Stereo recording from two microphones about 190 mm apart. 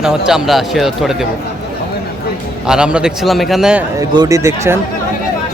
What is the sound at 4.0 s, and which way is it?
Speech, 15° right (ahead or behind).